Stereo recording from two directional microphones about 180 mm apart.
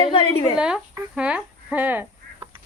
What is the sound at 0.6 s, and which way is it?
Speech, 5° right (ahead or behind).